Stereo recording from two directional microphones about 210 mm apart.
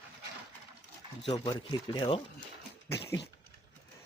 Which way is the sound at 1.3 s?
20° left (ahead or behind).